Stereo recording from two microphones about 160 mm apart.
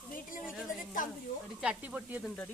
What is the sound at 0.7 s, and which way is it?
Speech, 55° left (ahead or behind).